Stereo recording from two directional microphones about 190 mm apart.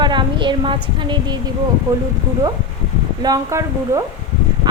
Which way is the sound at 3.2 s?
20° right (ahead or behind).